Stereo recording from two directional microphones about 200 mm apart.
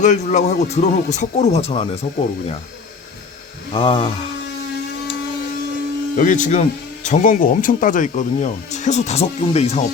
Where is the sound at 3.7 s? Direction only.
25° left (ahead or behind).